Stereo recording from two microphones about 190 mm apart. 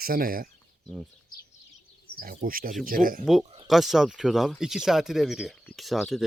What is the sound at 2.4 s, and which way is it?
Speech, 50° right (ahead or behind).